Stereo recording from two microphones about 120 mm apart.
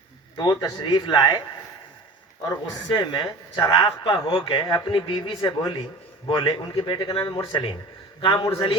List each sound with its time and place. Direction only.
0.3 s a man's voice: 35° left (ahead or behind)
2.5 s a man's voice: 40° left (ahead or behind)
4.6 s a man's voice: 35° left (ahead or behind)
8.3 s a man's voice: 25° left (ahead or behind)
8.5 s speech: 45° left (ahead or behind)